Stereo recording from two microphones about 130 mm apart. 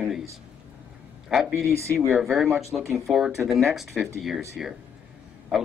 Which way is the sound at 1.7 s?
20° right (ahead or behind).